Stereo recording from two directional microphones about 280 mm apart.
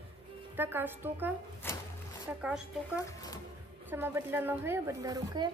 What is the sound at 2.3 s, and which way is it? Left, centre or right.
Speech, centre.